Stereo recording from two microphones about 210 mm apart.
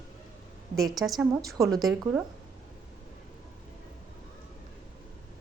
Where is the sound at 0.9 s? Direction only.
Centre (ahead or behind).